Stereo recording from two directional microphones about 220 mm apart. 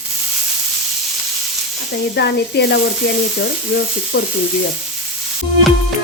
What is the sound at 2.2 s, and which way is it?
Speech, 50° left (ahead or behind).